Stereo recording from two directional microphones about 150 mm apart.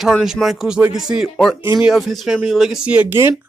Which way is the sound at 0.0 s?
Centre (ahead or behind).